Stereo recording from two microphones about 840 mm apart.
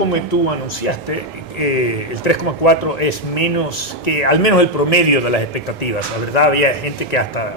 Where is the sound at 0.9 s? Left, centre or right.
Left.